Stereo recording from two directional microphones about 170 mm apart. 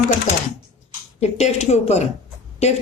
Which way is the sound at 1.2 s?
40° left (ahead or behind).